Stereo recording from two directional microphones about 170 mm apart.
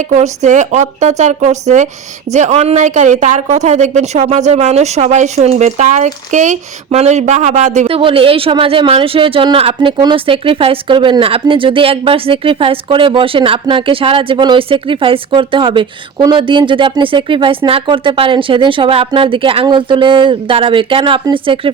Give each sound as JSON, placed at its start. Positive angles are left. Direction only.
{"t": 0.1, "sound": "a woman's voice", "side_deg": -40}